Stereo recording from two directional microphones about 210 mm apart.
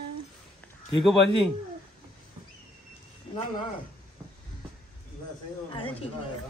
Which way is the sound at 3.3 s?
20° left (ahead or behind).